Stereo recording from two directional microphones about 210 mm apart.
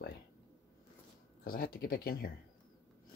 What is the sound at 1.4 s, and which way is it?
Speech, 45° left (ahead or behind).